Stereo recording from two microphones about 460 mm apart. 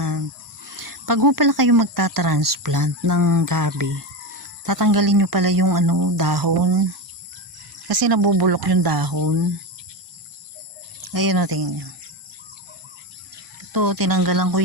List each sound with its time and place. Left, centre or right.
0.0 s speech: right
7.9 s speech: right
11.0 s speech: right
13.7 s speech: right